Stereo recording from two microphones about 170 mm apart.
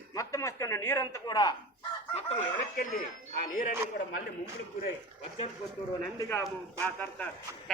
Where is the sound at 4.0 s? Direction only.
65° left (ahead or behind).